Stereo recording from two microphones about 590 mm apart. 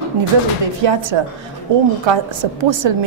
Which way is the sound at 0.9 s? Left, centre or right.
Right.